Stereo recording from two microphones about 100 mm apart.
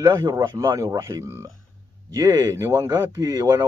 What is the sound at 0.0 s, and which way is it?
Speech, 40° right (ahead or behind).